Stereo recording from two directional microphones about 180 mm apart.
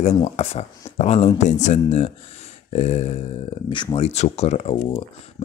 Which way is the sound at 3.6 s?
25° left (ahead or behind).